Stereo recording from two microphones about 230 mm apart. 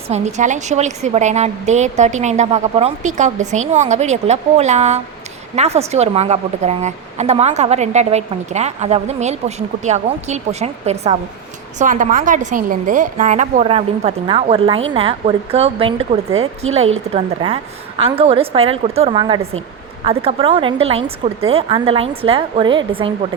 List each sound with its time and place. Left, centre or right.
0.1 s a woman's voice: right
16.3 s speech: right
17.2 s a woman's voice: right